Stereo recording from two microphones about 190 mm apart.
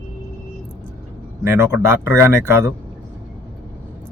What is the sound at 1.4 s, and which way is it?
Speech, 15° right (ahead or behind).